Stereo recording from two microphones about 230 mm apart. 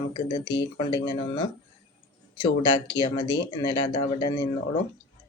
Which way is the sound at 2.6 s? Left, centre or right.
Centre.